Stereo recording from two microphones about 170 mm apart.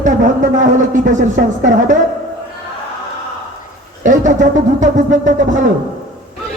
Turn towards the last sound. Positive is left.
turn(degrees=-50)  # may be behind; listen again after turning